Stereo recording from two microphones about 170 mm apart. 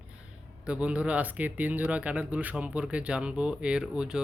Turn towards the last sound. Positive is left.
turn(degrees=-5)  # may be behind; listen again after turning